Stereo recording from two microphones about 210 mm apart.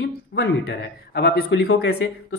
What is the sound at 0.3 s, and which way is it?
Speech, 50° left (ahead or behind).